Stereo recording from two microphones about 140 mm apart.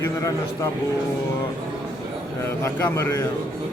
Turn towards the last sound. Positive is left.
turn(degrees=20)  # may be behind; listen again after turning